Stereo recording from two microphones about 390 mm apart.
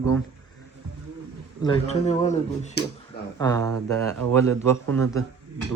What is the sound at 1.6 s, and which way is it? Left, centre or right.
Speech, centre.